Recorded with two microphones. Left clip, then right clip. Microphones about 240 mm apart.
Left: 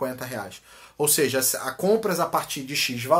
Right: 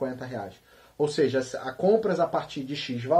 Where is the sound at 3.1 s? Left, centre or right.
Centre.